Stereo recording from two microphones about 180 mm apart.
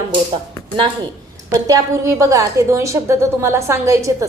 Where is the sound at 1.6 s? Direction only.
20° right (ahead or behind).